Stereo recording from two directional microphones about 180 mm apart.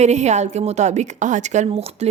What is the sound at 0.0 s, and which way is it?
A woman's voice, 40° right (ahead or behind).